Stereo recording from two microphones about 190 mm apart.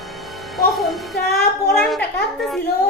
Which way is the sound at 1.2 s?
55° left (ahead or behind).